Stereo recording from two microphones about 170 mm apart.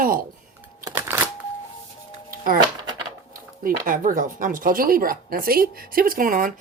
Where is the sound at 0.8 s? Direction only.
15° right (ahead or behind).